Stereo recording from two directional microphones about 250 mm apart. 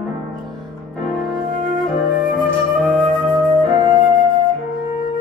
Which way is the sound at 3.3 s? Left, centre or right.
Centre.